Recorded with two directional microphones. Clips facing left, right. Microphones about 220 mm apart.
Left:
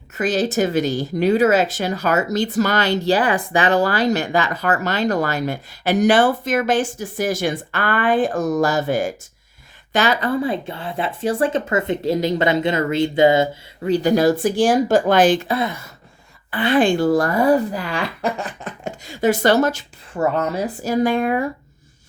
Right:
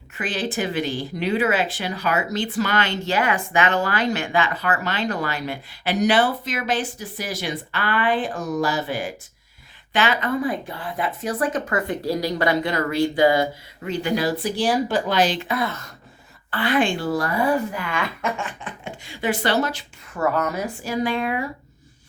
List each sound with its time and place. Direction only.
0.2 s speech: 40° left (ahead or behind); by 13.5 s 25° left (ahead or behind)
13.8 s speech: 35° left (ahead or behind)
15.4 s a woman's voice: 25° left (ahead or behind)
16.7 s speech: 40° left (ahead or behind)
20.1 s speech: 25° left (ahead or behind)
20.8 s speech: 45° left (ahead or behind)